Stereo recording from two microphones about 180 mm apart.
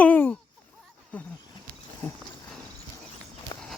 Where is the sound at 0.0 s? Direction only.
10° left (ahead or behind).